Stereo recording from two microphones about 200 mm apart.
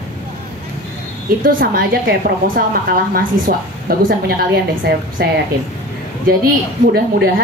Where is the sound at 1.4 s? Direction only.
45° right (ahead or behind).